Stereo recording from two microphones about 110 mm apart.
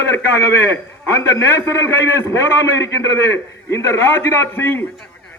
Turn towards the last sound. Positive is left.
turn(degrees=20)  # may be behind; listen again after turning